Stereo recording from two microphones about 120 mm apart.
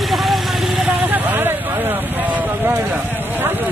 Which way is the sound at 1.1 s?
15° right (ahead or behind).